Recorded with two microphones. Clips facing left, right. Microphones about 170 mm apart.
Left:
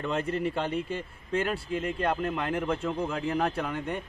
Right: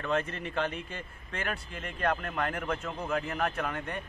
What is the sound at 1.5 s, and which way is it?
A man's voice, 30° left (ahead or behind).